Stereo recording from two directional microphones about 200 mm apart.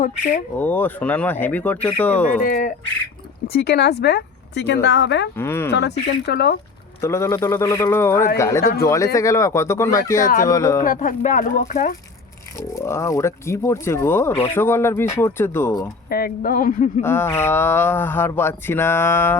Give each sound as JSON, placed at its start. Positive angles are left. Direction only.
{"t": 0.0, "sound": "speech", "side_deg": 40}
{"t": 0.6, "sound": "speech", "side_deg": 10}
{"t": 2.5, "sound": "speech", "side_deg": 40}
{"t": 3.4, "sound": "speech", "side_deg": 55}
{"t": 5.4, "sound": "speech", "side_deg": 10}
{"t": 5.7, "sound": "speech", "side_deg": 55}
{"t": 7.0, "sound": "speech", "side_deg": 15}
{"t": 10.8, "sound": "speech", "side_deg": 40}
{"t": 12.5, "sound": "speech", "side_deg": 15}
{"t": 16.0, "sound": "speech", "side_deg": 50}
{"t": 17.0, "sound": "speech", "side_deg": 10}